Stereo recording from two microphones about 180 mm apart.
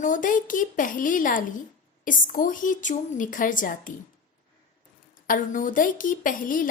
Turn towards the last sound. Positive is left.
turn(degrees=50)  # may be behind; listen again after turning